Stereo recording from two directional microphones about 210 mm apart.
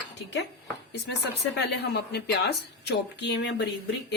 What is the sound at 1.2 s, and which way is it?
Speech, 55° left (ahead or behind).